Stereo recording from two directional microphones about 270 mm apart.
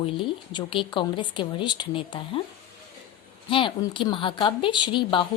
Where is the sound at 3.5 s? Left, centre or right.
Centre.